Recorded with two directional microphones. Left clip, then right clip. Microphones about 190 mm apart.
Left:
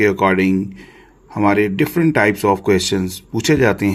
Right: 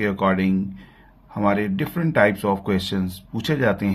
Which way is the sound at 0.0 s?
40° left (ahead or behind).